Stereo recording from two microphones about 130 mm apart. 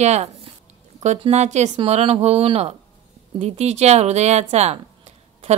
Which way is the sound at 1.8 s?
50° right (ahead or behind).